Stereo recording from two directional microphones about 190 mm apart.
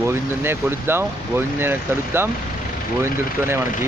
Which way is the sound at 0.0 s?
15° right (ahead or behind).